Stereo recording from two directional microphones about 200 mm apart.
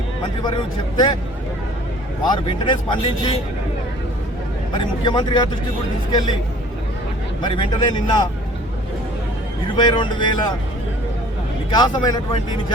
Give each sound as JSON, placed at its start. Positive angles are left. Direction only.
{"t": 0.4, "sound": "a man's voice", "side_deg": 20}
{"t": 2.6, "sound": "a man's voice", "side_deg": 25}
{"t": 4.7, "sound": "a man's voice", "side_deg": 25}
{"t": 7.4, "sound": "a man's voice", "side_deg": 25}
{"t": 9.7, "sound": "a man's voice", "side_deg": 25}
{"t": 11.7, "sound": "a man's voice", "side_deg": 20}